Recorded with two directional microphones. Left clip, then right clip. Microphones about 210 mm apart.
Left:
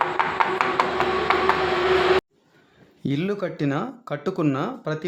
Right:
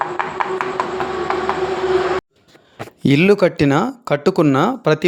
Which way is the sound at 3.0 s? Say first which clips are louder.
Right 13 dB; 35° right (ahead or behind).